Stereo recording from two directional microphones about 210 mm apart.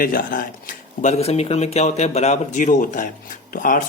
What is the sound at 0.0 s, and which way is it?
Speech, 40° left (ahead or behind).